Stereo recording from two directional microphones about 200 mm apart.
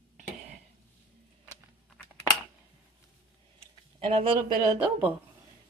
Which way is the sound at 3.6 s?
25° right (ahead or behind).